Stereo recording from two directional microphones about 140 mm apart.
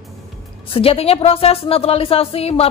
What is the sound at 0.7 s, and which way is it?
A woman's voice, 40° left (ahead or behind).